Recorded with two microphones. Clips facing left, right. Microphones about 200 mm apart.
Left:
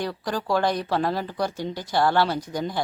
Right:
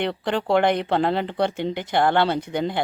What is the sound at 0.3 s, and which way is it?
Speech, 25° right (ahead or behind).